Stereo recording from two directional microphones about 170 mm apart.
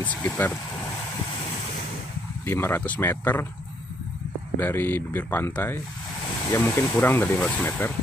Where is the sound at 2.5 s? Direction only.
15° left (ahead or behind).